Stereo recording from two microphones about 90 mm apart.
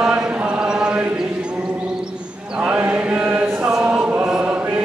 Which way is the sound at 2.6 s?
15° right (ahead or behind).